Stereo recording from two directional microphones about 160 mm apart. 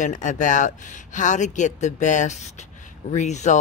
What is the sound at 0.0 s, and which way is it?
Speech, 50° left (ahead or behind).